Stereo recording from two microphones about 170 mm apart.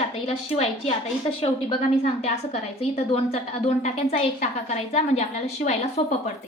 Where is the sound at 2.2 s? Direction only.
40° left (ahead or behind).